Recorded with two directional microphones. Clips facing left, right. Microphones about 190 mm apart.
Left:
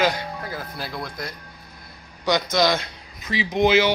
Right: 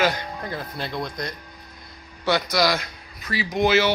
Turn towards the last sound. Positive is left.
turn(degrees=15)  # may be behind; listen again after turning